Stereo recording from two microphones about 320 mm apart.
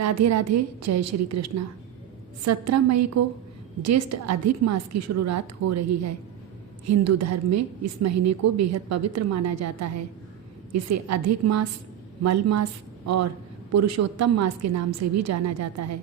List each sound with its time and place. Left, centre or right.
0.0 s a woman's voice: right
13.7 s a woman's voice: right